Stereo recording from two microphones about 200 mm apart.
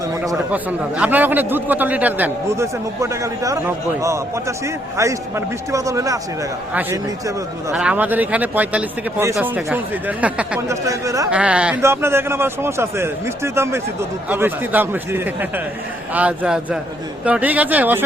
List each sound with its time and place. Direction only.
0.1 s a man's voice: 15° right (ahead or behind)
7.7 s a man's voice: 5° right (ahead or behind)
11.3 s a man's voice: 5° right (ahead or behind)